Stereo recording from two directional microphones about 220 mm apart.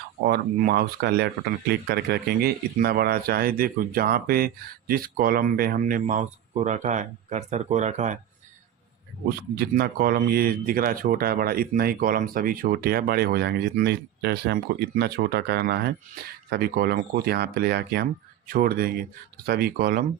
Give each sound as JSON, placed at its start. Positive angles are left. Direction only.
{"t": 0.3, "sound": "speech", "side_deg": -45}
{"t": 9.6, "sound": "speech", "side_deg": -45}